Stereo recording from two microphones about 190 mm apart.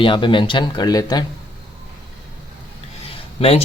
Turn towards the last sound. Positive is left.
turn(degrees=30)  # may be behind; listen again after turning